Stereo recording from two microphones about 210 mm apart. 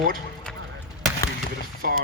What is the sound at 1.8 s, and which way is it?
Speech, 40° right (ahead or behind).